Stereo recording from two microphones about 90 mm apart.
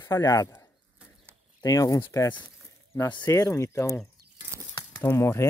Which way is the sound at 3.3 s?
35° left (ahead or behind).